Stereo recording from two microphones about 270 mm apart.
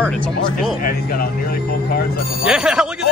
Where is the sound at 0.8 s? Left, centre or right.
Left.